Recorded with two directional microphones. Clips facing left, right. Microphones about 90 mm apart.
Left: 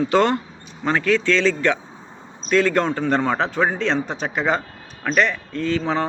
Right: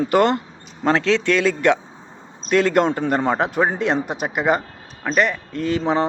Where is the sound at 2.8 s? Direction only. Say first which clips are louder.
Right 2 dB; 20° right (ahead or behind).